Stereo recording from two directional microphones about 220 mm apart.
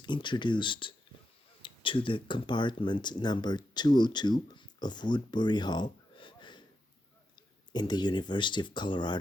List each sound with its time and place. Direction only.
0.0 s speech: 20° left (ahead or behind)